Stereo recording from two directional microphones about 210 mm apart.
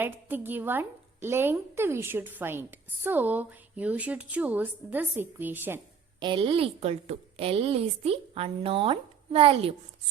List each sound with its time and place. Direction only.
0.0 s a woman's voice: 10° right (ahead or behind)
6.1 s a woman's voice: 25° right (ahead or behind)